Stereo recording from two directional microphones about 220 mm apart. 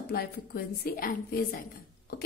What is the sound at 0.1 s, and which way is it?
A woman's voice, 45° left (ahead or behind).